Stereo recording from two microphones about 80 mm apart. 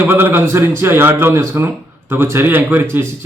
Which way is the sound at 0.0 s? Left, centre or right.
Right.